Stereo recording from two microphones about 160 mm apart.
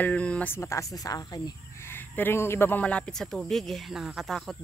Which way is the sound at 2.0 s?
10° left (ahead or behind).